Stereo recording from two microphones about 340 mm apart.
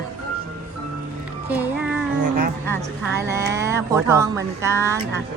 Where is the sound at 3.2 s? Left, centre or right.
Centre.